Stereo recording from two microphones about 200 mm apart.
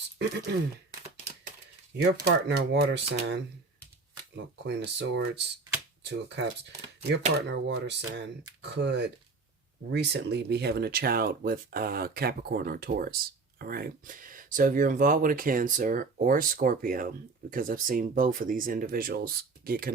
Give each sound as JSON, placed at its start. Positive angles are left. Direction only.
{"t": 0.2, "sound": "speech", "side_deg": -55}
{"t": 2.0, "sound": "speech", "side_deg": -55}
{"t": 4.5, "sound": "speech", "side_deg": -60}
{"t": 7.4, "sound": "speech", "side_deg": -60}